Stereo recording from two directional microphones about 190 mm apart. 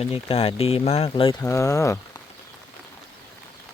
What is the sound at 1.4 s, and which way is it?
Speech, 15° left (ahead or behind).